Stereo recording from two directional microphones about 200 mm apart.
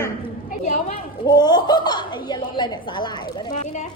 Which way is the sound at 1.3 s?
20° left (ahead or behind).